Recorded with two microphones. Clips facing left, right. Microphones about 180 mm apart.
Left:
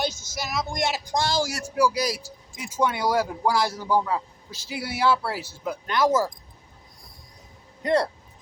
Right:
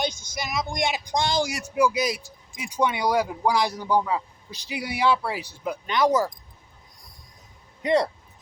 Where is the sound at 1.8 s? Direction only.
20° right (ahead or behind).